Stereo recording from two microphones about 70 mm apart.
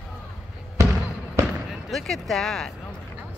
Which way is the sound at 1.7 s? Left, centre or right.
Centre.